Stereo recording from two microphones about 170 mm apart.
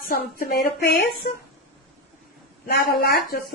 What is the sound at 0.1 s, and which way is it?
Speech, 55° left (ahead or behind).